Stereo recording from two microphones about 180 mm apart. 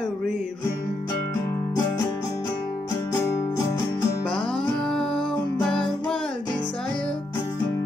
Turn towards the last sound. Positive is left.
turn(degrees=5)  # may be behind; listen again after turning